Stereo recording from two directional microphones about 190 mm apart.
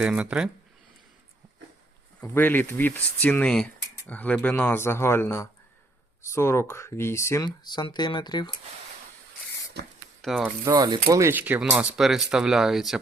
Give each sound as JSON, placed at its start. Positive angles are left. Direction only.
{"t": 0.0, "sound": "speech", "side_deg": -5}
{"t": 2.2, "sound": "speech", "side_deg": 10}
{"t": 9.8, "sound": "speech", "side_deg": -60}
{"t": 10.2, "sound": "speech", "side_deg": 0}
{"t": 10.4, "sound": "speech", "side_deg": -20}